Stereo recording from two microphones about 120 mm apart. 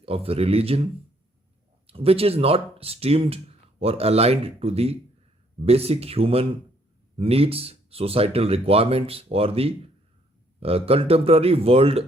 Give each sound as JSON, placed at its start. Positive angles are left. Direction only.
{"t": 0.0, "sound": "speech", "side_deg": -55}
{"t": 1.9, "sound": "speech", "side_deg": -55}